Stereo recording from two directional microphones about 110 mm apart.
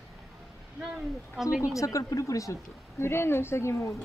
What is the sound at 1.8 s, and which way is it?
Speech, 30° left (ahead or behind).